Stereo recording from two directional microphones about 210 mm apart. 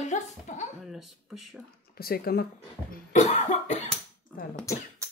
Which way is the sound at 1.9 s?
45° left (ahead or behind).